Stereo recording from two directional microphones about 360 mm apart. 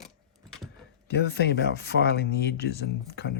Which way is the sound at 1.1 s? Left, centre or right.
Left.